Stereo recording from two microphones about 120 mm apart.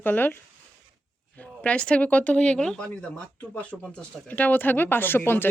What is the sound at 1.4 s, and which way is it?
Speech, 10° left (ahead or behind).